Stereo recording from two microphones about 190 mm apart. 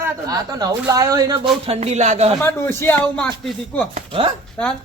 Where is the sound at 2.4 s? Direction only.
10° left (ahead or behind).